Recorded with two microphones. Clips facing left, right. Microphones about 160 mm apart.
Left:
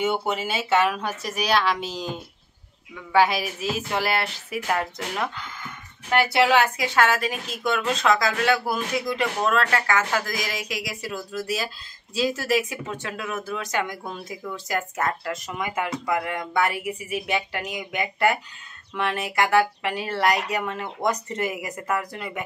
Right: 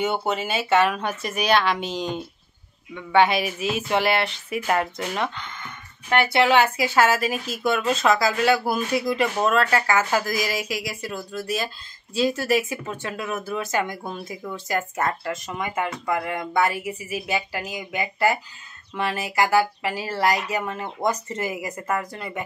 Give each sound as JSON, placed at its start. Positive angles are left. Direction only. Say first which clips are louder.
{"t": 0.8, "sound": "speech", "louder": "right 1 dB", "side_deg": 0}